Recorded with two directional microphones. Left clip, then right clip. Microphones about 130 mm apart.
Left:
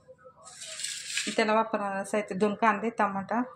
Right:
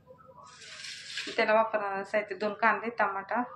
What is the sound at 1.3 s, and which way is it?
Speech, 85° left.